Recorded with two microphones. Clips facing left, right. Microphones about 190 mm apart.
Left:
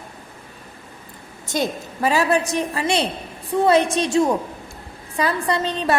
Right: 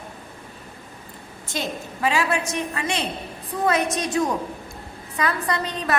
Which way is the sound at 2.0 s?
40° left (ahead or behind).